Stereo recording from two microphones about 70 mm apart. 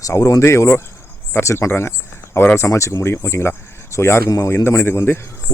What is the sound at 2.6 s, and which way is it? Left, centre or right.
Speech, left.